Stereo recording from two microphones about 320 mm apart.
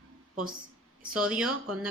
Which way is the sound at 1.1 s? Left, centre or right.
Centre.